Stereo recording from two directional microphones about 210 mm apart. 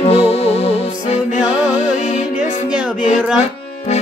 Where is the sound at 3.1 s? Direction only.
5° right (ahead or behind).